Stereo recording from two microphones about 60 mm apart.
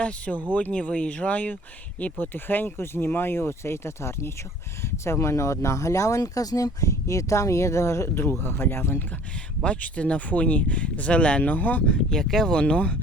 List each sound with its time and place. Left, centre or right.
0.5 s speech: left
9.6 s speech: left
11.9 s speech: centre